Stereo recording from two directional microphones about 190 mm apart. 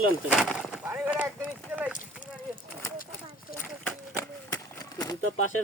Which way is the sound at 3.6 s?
5° left (ahead or behind).